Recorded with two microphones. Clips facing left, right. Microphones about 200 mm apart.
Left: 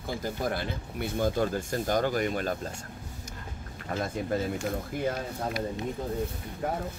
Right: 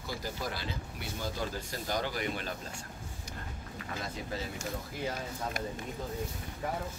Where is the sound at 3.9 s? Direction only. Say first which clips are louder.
Left 9 dB; 50° left (ahead or behind).